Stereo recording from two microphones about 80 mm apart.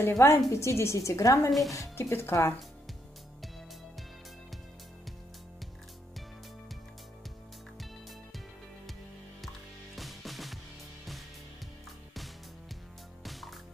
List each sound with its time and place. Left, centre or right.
0.0 s a woman's voice: left
1.5 s speech: centre
2.0 s a woman's voice: left
9.9 s music: centre
13.2 s music: centre